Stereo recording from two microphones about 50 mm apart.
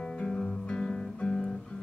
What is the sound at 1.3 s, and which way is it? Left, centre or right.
Guitar, centre.